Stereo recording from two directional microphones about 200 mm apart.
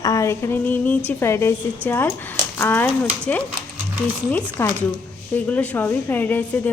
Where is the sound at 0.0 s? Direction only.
15° left (ahead or behind).